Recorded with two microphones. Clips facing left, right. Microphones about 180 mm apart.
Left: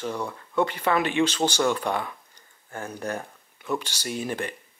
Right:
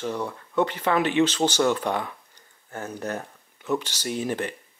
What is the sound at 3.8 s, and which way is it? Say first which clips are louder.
Speech: right 2 dB; 10° left (ahead or behind).